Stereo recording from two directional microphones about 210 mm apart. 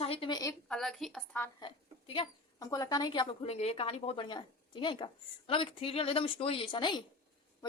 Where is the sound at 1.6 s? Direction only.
25° left (ahead or behind).